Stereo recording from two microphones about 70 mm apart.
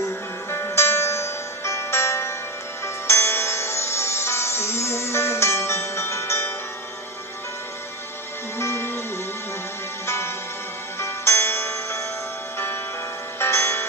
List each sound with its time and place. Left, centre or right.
0.5 s music: left
8.5 s music: left
10.0 s music: left
13.4 s tick-tock: left